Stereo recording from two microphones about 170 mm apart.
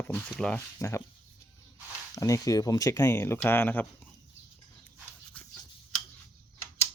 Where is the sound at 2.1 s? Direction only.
20° left (ahead or behind).